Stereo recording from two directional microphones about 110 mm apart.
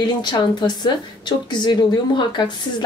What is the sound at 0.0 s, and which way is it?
A woman's voice, 40° left (ahead or behind).